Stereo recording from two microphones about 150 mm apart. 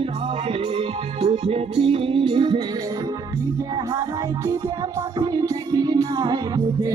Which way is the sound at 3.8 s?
20° right (ahead or behind).